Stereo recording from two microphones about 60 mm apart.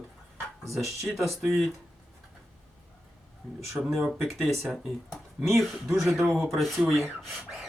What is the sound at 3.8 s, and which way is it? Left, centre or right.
Speech, right.